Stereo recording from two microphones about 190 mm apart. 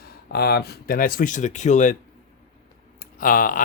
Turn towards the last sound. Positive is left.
turn(degrees=45)  # may be behind; listen again after turning